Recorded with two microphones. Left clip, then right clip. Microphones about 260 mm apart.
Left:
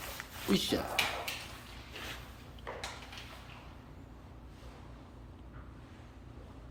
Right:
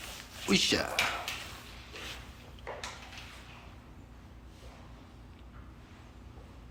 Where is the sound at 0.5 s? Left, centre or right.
Centre.